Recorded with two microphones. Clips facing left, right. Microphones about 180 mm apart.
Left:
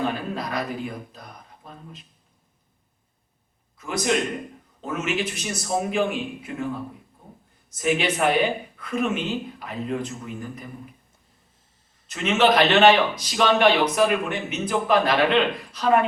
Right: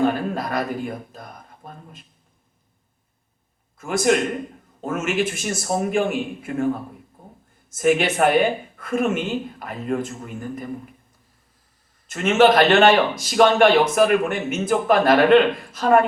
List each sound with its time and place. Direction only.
0.1 s speech: 50° right (ahead or behind)
3.8 s a man's voice: 50° right (ahead or behind)
7.8 s a man's voice: 50° right (ahead or behind)
12.0 s a man's voice: 50° right (ahead or behind)